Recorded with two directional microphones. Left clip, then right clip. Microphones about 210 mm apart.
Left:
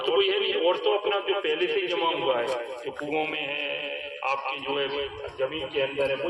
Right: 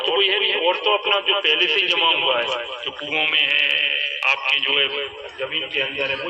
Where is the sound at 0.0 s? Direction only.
60° left (ahead or behind); by 4.9 s 35° left (ahead or behind).